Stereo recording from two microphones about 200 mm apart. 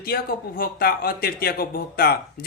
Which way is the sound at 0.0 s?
45° left (ahead or behind).